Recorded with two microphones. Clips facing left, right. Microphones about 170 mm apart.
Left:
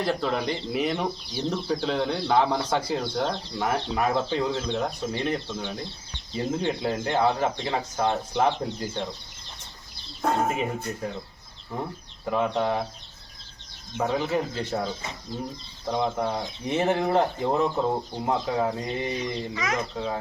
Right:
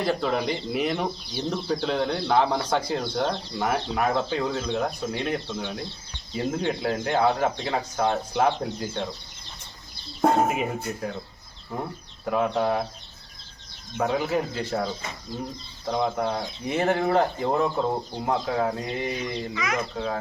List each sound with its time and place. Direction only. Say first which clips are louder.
0.0 s speech: right 1 dB; centre (ahead or behind)
10.5 s speech: right 1 dB; 5° right (ahead or behind)
14.0 s speech: right 1 dB; centre (ahead or behind)
16.1 s speech: right 1 dB; centre (ahead or behind)
19.5 s speech: right 1 dB; 40° left (ahead or behind)